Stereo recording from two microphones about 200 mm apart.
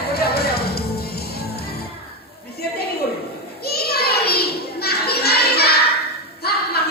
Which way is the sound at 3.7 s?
50° left (ahead or behind).